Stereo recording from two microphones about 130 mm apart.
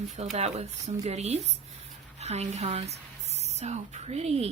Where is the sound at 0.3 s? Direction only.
55° right (ahead or behind).